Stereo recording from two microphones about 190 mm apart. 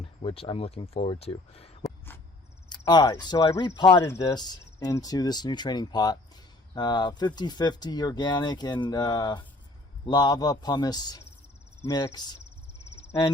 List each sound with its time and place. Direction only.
0.0 s speech: 30° left (ahead or behind)
13.0 s cricket: 30° left (ahead or behind)